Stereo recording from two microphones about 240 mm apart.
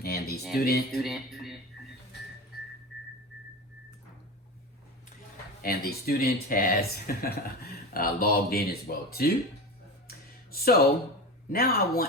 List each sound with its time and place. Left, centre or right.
0.0 s music: left
0.6 s speech: left
1.0 s a sound: centre
5.6 s speech: left
10.1 s a sound: left
11.5 s speech: left